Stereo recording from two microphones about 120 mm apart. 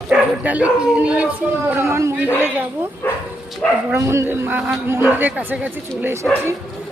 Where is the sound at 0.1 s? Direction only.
10° right (ahead or behind).